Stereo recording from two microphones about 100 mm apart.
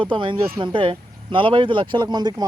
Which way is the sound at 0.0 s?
55° right (ahead or behind).